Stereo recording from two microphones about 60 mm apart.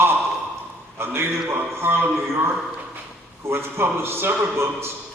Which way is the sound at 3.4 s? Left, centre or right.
Right.